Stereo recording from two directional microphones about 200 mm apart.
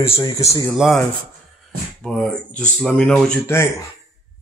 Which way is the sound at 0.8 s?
Centre (ahead or behind).